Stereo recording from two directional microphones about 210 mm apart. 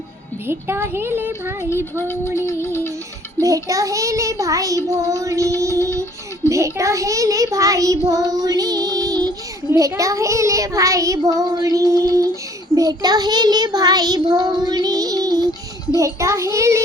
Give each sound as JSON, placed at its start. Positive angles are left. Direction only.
{"t": 0.4, "sound": "a child's voice", "side_deg": -10}
{"t": 1.7, "sound": "music", "side_deg": 10}
{"t": 3.4, "sound": "a child's voice", "side_deg": -15}
{"t": 12.7, "sound": "child singing", "side_deg": -20}
{"t": 16.0, "sound": "a child's voice", "side_deg": -15}